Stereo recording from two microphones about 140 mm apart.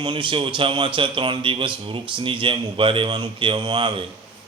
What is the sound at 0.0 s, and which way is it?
Speech, 35° right (ahead or behind).